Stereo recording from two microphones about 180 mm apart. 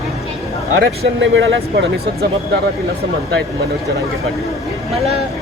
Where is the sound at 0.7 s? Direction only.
80° right.